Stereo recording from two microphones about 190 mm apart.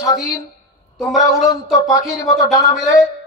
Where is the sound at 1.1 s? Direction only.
20° left (ahead or behind).